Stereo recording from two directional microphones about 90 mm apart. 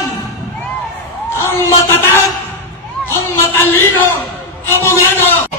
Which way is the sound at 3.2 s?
30° left (ahead or behind).